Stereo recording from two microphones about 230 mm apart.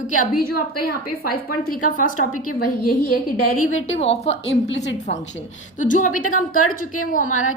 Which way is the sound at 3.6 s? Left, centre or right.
Left.